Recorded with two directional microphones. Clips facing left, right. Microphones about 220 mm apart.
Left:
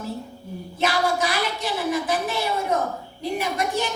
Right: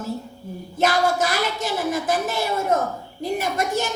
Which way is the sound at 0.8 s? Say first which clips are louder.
Right 3 dB; 45° right (ahead or behind).